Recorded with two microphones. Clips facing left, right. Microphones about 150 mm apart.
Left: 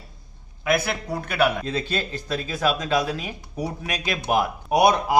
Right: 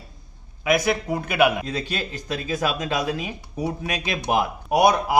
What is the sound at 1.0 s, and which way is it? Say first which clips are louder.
A man's voice: right 2 dB; 10° right (ahead or behind).